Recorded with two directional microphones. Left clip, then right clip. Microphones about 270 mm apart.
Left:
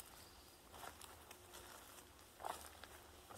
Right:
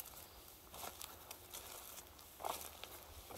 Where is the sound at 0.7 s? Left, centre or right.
Right.